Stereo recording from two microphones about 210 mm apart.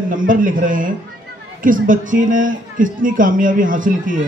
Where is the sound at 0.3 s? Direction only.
40° right (ahead or behind).